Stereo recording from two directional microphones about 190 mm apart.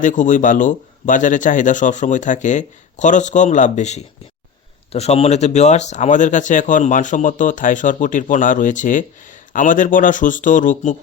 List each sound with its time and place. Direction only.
0.0 s speech: 40° left (ahead or behind)